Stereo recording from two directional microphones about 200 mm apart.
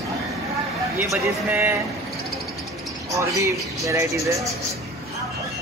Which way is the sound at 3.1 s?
15° right (ahead or behind).